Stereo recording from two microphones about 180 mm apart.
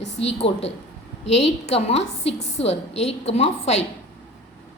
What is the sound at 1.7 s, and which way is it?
Speech, 35° left (ahead or behind).